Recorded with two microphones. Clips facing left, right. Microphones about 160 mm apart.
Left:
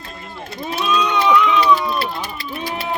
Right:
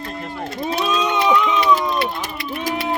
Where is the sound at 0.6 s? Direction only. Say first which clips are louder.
Left 1 dB; 30° right (ahead or behind).